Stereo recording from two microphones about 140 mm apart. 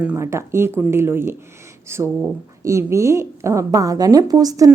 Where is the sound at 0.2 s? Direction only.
20° right (ahead or behind).